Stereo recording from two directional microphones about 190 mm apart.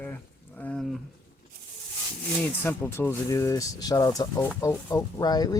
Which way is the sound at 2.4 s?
10° left (ahead or behind).